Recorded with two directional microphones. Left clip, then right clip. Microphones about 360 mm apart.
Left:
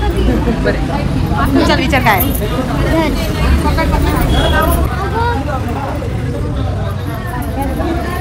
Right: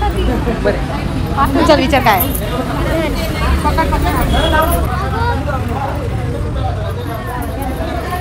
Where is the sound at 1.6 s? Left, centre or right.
Centre.